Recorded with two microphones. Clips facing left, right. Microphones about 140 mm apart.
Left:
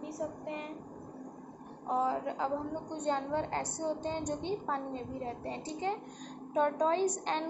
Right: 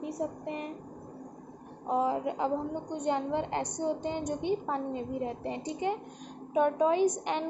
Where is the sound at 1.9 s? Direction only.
15° right (ahead or behind).